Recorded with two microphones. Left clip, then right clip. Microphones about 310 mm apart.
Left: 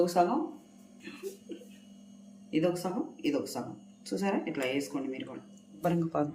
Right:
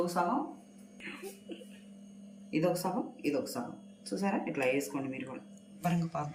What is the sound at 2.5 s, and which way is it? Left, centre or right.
Speech, centre.